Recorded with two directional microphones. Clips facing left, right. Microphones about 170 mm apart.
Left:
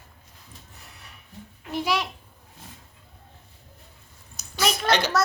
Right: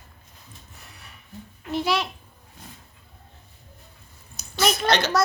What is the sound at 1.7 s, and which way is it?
Speech, 10° left (ahead or behind).